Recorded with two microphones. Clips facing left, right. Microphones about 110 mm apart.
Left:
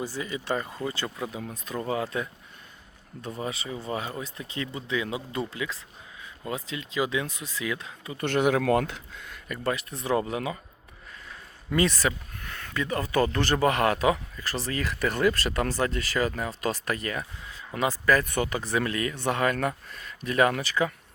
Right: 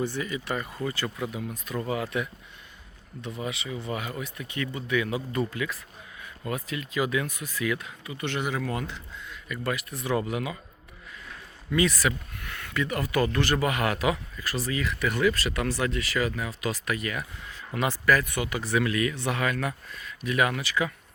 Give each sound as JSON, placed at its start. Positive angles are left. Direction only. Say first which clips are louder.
{"t": 0.2, "sound": "speech", "louder": "left 1 dB", "side_deg": 25}
{"t": 8.2, "sound": "speech", "louder": "left 6 dB", "side_deg": 50}
{"t": 9.6, "sound": "speech", "louder": "left 2 dB", "side_deg": 30}
{"t": 11.7, "sound": "speech", "louder": "even", "side_deg": 35}